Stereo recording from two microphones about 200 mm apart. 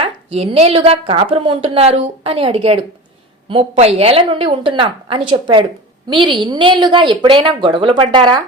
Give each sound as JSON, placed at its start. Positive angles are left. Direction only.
{"t": 0.0, "sound": "a woman's voice", "side_deg": -30}